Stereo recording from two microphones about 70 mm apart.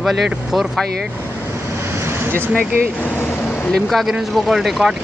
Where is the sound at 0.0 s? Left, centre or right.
Centre.